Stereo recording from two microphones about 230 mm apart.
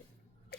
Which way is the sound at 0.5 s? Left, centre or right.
Left.